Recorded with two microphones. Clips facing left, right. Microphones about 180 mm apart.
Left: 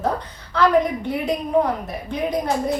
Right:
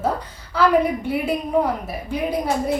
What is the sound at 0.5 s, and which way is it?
A woman's voice, 5° right (ahead or behind).